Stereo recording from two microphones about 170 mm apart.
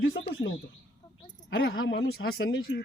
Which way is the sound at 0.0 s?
90° left.